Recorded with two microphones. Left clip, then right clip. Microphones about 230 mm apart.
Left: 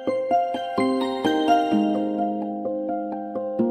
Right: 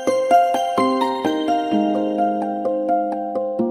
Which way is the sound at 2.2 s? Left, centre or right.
Right.